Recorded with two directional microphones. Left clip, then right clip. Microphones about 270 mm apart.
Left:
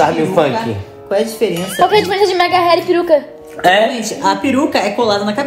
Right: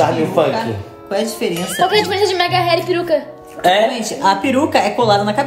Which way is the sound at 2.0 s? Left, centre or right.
Left.